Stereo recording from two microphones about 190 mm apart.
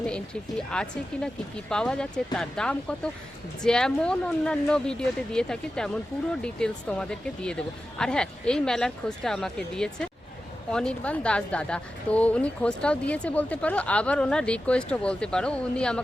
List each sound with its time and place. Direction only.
0.1 s speech: 5° left (ahead or behind)